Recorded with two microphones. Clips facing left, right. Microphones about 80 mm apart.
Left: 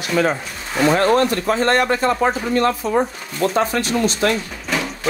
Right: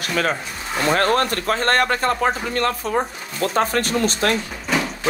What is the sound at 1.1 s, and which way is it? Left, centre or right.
Speech, right.